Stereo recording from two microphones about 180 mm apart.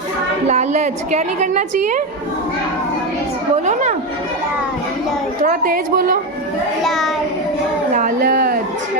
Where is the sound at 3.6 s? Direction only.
40° right (ahead or behind).